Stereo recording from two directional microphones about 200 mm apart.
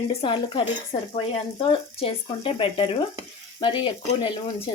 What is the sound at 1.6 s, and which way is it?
Speech, 25° left (ahead or behind).